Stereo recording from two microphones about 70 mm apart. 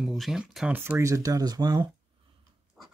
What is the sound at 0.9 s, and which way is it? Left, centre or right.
Speech, right.